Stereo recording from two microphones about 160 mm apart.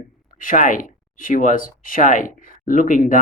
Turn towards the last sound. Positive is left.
turn(degrees=55)  # may be behind; listen again after turning